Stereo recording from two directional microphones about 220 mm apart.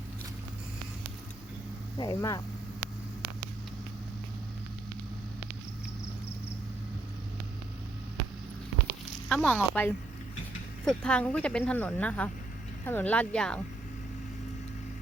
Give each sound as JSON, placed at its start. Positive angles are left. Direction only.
{"t": 2.0, "sound": "speech", "side_deg": 20}
{"t": 9.3, "sound": "speech", "side_deg": 10}